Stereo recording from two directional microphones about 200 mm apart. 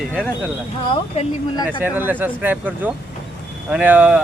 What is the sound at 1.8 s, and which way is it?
Speech, 10° right (ahead or behind).